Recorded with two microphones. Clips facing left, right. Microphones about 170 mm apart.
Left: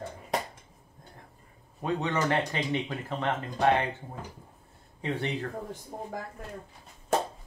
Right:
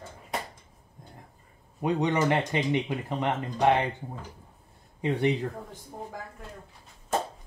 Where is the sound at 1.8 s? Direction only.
15° right (ahead or behind).